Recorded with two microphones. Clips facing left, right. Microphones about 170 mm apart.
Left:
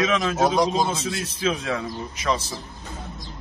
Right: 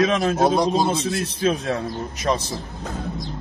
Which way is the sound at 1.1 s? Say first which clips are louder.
Right 4 dB; 45° right (ahead or behind).